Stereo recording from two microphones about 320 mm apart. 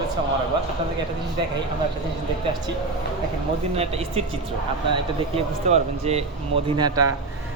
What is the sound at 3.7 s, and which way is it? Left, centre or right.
Speech, centre.